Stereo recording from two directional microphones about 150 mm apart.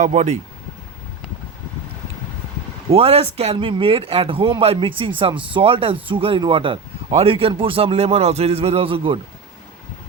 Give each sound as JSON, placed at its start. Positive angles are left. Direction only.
{"t": 0.0, "sound": "speech", "side_deg": -50}
{"t": 2.9, "sound": "speech", "side_deg": -40}